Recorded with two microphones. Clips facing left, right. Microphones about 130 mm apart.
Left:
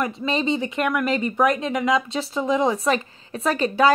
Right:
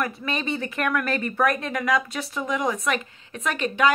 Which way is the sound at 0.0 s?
25° left (ahead or behind).